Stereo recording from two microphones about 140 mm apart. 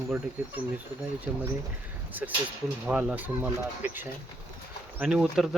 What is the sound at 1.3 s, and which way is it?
Speech, 5° right (ahead or behind).